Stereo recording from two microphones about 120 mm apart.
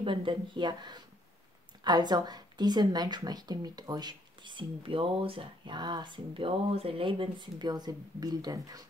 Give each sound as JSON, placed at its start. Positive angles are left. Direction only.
{"t": 0.0, "sound": "a woman's voice", "side_deg": -45}